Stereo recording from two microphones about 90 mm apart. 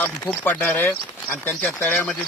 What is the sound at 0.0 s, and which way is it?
Speech, 20° left (ahead or behind).